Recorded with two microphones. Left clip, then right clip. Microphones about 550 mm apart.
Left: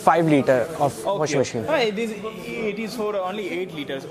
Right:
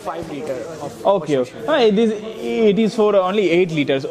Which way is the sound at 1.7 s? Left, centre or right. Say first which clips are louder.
Right 10 dB; right.